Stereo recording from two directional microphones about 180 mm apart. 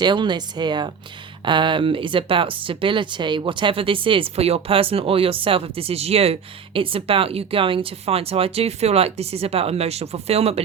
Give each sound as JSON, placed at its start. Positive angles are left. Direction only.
{"t": 0.0, "sound": "speech", "side_deg": -25}